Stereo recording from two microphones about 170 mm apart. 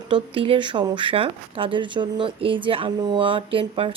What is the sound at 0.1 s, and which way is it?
Speech, 30° right (ahead or behind).